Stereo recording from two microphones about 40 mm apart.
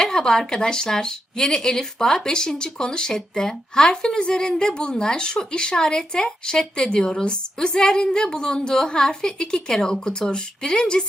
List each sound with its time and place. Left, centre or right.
0.0 s a woman's voice: centre